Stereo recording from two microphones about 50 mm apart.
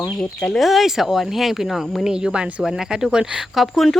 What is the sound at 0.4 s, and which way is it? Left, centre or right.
Speech, centre.